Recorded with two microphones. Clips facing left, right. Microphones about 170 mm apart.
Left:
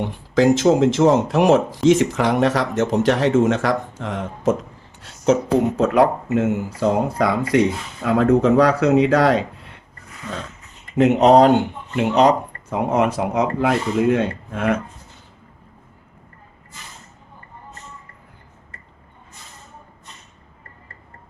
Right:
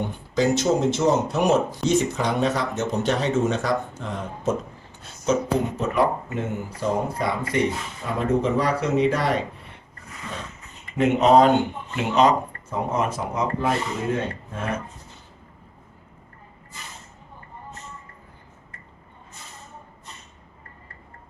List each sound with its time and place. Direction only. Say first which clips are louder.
0.0 s speech: left 6 dB; 90° left
10.9 s speech: left 4 dB; 75° left (ahead or behind); by 14.7 s 90° left